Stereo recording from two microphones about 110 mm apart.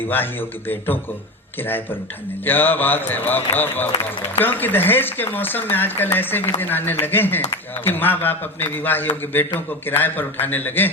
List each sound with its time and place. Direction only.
2.4 s a man's voice: 20° left (ahead or behind)